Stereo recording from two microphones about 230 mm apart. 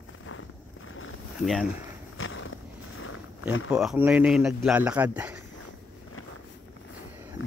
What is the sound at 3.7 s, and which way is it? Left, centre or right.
Speech, centre.